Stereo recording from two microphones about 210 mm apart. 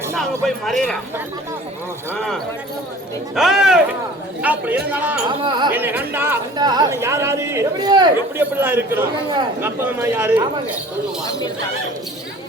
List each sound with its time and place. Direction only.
0.4 s speech: centre (ahead or behind)
2.1 s speech: centre (ahead or behind)
5.4 s speech: 20° right (ahead or behind)
5.7 s speech: 10° right (ahead or behind)
8.4 s speech: 10° right (ahead or behind)
11.3 s speech: 15° left (ahead or behind)